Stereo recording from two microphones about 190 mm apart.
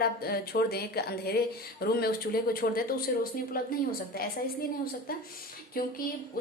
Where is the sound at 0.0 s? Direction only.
55° left (ahead or behind).